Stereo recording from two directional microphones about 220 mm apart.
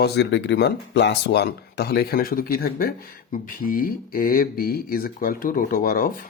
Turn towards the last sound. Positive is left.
turn(degrees=40)  # may be behind; listen again after turning